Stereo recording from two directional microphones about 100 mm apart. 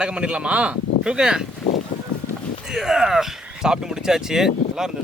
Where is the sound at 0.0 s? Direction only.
10° right (ahead or behind).